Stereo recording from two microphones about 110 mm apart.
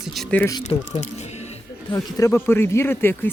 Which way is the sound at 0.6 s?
90° left.